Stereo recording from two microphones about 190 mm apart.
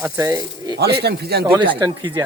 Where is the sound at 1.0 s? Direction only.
60° right (ahead or behind).